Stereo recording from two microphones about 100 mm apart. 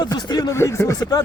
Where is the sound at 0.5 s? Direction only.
25° left (ahead or behind).